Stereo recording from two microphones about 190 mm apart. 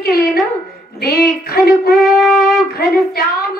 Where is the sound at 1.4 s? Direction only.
55° left (ahead or behind).